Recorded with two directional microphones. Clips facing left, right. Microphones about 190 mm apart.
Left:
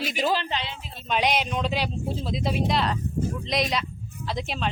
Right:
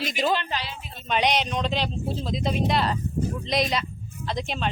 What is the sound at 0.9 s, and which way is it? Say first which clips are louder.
A man's voice: right 1 dB; centre (ahead or behind).